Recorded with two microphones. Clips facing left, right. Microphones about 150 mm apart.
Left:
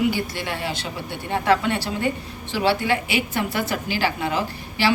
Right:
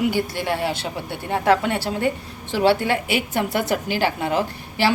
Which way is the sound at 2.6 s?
55° right (ahead or behind).